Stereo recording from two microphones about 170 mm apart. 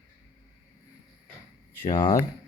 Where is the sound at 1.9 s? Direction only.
25° left (ahead or behind).